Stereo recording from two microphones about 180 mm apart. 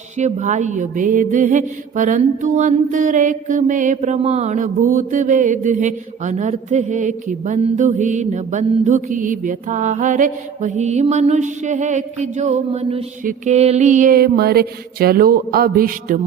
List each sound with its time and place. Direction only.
0.2 s mantra: 40° right (ahead or behind)